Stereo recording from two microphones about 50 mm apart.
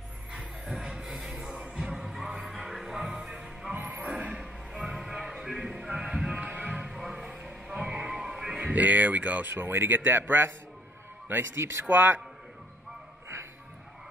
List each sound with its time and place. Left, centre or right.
0.3 s music: centre
3.7 s music: right
4.1 s music: centre
6.4 s music: right
6.9 s music: centre
8.7 s speech: right
9.5 s speech: right
11.8 s speech: right